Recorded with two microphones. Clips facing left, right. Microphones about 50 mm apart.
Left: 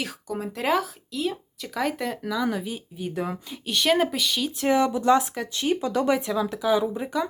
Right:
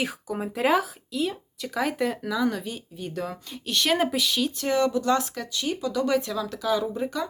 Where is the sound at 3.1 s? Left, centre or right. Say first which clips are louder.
Left 2 dB; centre.